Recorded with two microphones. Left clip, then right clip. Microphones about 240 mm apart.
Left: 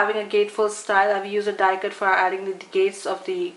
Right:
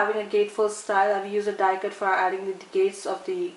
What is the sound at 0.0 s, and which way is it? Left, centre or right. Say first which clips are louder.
A woman's voice: left 3 dB; centre.